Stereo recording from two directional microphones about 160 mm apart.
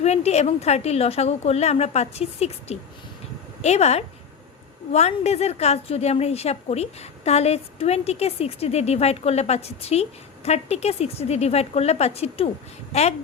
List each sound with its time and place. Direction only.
0.0 s a woman's voice: 40° left (ahead or behind)